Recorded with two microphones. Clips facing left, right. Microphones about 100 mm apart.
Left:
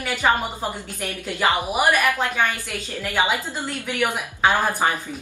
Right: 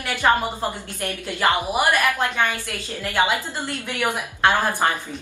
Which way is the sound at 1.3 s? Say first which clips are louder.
Even; 10° left (ahead or behind).